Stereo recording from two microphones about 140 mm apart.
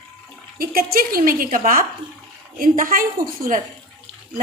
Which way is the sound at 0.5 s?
90° right.